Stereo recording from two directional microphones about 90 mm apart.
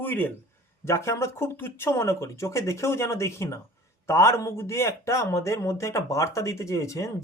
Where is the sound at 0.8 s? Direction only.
30° left (ahead or behind).